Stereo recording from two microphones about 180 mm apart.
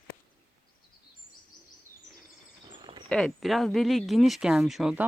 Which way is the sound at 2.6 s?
25° right (ahead or behind).